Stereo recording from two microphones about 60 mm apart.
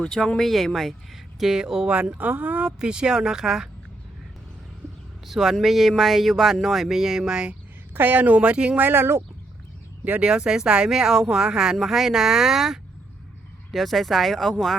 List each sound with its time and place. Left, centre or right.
0.0 s speech: centre
5.3 s speech: centre
7.9 s speech: right
8.4 s speech: centre
8.8 s speech: right
10.0 s speech: right
10.2 s speech: centre